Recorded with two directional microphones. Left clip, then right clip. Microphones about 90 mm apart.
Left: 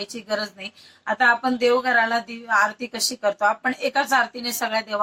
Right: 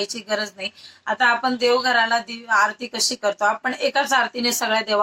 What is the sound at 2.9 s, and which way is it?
Speech, 20° right (ahead or behind).